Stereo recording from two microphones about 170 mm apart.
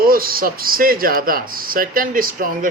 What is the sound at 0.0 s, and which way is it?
Speech, 60° right (ahead or behind).